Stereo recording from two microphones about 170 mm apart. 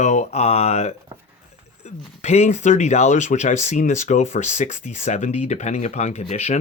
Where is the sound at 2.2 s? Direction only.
40° left (ahead or behind).